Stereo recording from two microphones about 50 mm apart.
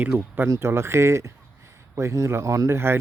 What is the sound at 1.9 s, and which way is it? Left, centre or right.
Speech, right.